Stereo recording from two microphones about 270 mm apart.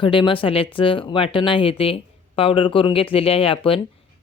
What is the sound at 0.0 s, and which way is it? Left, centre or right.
Speech, centre.